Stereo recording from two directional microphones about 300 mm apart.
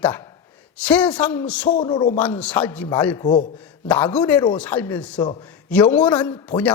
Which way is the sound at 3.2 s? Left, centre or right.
Left.